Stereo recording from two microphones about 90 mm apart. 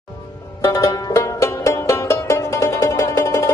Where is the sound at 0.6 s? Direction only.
35° left (ahead or behind).